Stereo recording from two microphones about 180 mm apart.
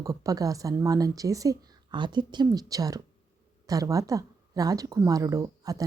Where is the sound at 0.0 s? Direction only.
20° right (ahead or behind).